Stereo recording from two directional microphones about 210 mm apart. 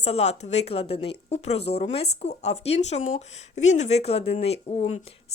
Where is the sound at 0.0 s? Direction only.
30° left (ahead or behind).